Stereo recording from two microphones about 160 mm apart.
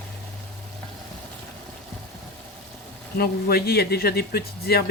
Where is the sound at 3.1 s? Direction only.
80° left.